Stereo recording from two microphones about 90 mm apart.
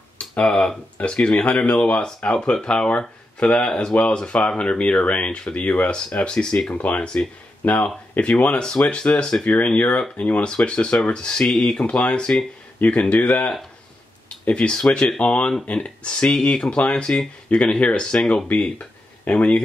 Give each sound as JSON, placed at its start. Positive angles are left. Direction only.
{"t": 0.3, "sound": "speech", "side_deg": 10}